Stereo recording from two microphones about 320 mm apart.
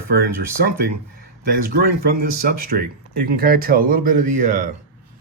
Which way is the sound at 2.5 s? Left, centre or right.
Right.